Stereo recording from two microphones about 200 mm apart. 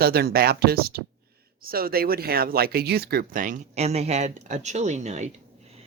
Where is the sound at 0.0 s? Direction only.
50° right (ahead or behind).